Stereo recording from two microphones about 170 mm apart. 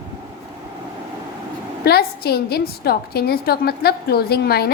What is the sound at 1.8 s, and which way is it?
A woman's voice, 70° left (ahead or behind).